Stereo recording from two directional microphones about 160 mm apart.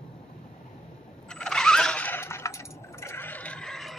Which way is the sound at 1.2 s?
5° left (ahead or behind).